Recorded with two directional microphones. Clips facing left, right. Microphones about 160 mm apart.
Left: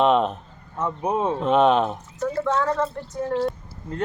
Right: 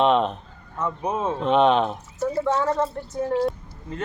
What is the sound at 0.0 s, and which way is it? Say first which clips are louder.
Speech: left 1 dB; 5° left (ahead or behind).